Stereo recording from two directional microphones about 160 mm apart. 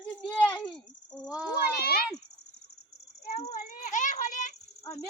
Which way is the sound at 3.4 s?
40° left (ahead or behind).